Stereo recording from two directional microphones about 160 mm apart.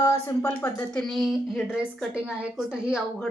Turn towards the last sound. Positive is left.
turn(degrees=-5)  # may be behind; listen again after turning